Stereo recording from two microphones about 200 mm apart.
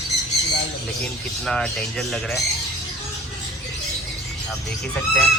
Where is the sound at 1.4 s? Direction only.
5° left (ahead or behind).